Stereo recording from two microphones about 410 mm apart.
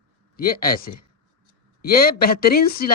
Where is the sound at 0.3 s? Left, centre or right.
Left.